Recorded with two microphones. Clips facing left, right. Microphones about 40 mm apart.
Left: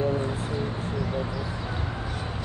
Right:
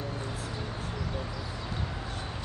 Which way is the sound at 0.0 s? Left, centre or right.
Left.